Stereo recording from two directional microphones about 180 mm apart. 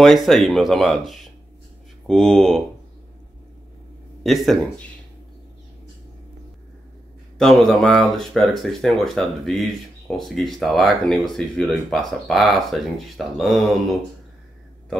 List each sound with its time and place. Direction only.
0.0 s speech: centre (ahead or behind)
4.2 s speech: centre (ahead or behind)
7.3 s speech: centre (ahead or behind)